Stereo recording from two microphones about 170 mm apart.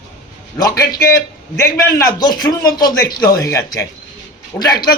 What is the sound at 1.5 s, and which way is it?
A man's voice, 15° left (ahead or behind).